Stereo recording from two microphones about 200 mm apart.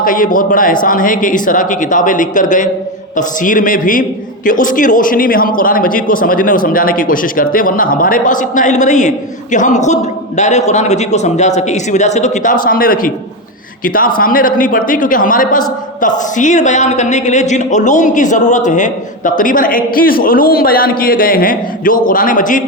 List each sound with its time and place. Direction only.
0.0 s a man's voice: 45° left (ahead or behind)